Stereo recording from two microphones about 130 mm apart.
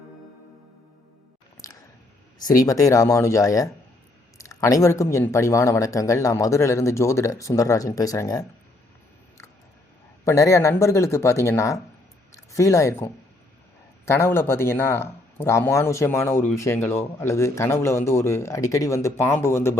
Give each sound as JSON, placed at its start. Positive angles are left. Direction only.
{"t": 2.4, "sound": "speech", "side_deg": 25}
{"t": 10.2, "sound": "speech", "side_deg": 25}